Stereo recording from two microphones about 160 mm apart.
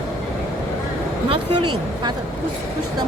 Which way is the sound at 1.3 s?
30° right (ahead or behind).